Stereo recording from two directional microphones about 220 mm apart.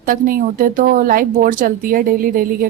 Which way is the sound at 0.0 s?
40° right (ahead or behind).